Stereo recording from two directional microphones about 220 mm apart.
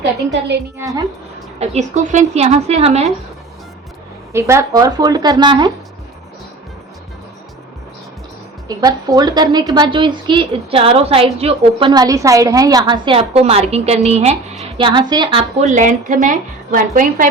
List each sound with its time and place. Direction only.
1.5 s a woman's voice: 30° right (ahead or behind)
4.3 s speech: 10° right (ahead or behind)
8.6 s a woman's voice: 15° right (ahead or behind)
11.9 s a woman's voice: 15° right (ahead or behind); by 17.2 s 35° right (ahead or behind)